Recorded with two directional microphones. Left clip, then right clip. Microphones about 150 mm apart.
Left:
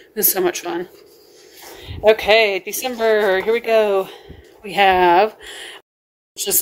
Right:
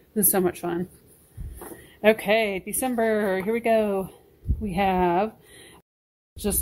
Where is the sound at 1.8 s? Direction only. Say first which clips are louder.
Left 7 dB; 10° right (ahead or behind).